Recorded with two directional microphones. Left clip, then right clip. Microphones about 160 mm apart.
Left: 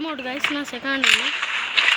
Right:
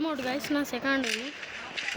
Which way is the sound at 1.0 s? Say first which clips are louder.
Left 14 dB; 50° left (ahead or behind).